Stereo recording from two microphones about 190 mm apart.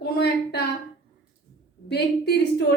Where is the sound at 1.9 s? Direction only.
60° left (ahead or behind).